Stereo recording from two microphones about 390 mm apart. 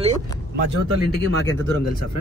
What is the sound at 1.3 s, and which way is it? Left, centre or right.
Speech, left.